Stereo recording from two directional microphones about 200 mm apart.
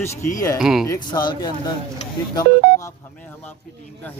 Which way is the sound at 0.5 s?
5° right (ahead or behind).